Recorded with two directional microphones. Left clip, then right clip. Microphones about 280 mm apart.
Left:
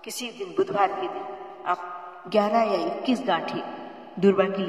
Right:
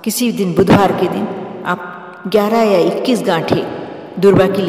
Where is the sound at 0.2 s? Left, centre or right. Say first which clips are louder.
Right 18 dB; right.